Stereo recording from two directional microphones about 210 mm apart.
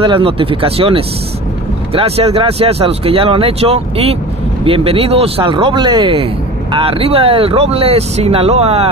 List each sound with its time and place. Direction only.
0.0 s speech: 25° right (ahead or behind)